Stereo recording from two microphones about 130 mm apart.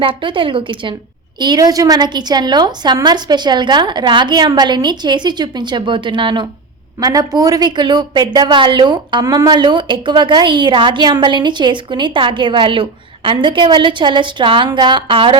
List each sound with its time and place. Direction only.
0.0 s a woman's voice: 40° right (ahead or behind)
7.0 s a woman's voice: 30° right (ahead or behind)